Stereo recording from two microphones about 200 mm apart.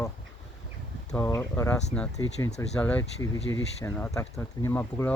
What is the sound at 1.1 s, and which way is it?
Speech, 10° left (ahead or behind).